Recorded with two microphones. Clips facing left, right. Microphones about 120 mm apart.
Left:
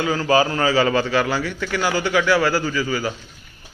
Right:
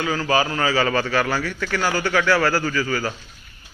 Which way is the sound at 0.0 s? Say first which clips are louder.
Left 3 dB; 30° left (ahead or behind).